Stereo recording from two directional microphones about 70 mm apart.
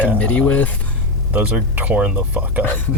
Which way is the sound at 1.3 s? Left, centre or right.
Right.